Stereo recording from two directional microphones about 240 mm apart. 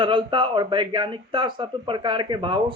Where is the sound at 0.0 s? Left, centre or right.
Right.